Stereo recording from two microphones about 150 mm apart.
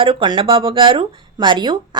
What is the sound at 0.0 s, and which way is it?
Speech, 35° right (ahead or behind).